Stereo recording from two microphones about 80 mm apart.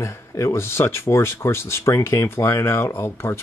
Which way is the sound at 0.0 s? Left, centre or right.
Left.